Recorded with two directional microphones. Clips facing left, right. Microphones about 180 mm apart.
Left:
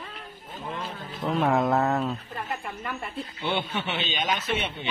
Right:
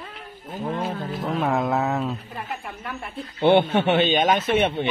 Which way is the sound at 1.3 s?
Centre (ahead or behind).